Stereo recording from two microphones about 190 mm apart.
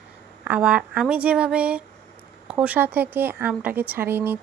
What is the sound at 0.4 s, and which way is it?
Speech, 5° right (ahead or behind).